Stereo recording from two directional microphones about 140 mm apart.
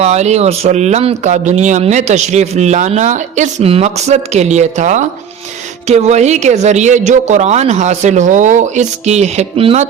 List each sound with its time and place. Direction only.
0.0 s speech: 50° right (ahead or behind)